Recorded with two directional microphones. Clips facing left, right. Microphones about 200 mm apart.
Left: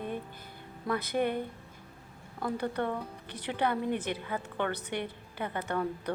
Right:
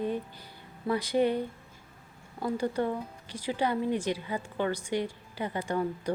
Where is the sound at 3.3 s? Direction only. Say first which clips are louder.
Right 3 dB; 60° left (ahead or behind).